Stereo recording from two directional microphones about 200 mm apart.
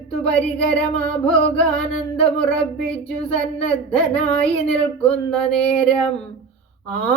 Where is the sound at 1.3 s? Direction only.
5° left (ahead or behind).